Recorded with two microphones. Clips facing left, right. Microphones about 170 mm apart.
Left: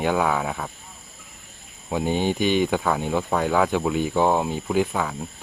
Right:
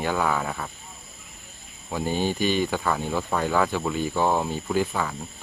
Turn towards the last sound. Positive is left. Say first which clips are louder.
# left 2 dB
turn(degrees=5)  # may be behind; listen again after turning